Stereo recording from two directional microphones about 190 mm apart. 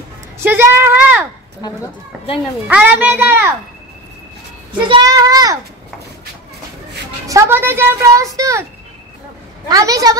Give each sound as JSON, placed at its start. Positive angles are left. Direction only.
{"t": 0.4, "sound": "speech", "side_deg": -10}
{"t": 2.3, "sound": "a child's voice", "side_deg": -5}
{"t": 4.7, "sound": "a child's voice", "side_deg": -25}
{"t": 7.2, "sound": "a child's voice", "side_deg": -15}
{"t": 9.7, "sound": "a child's voice", "side_deg": -20}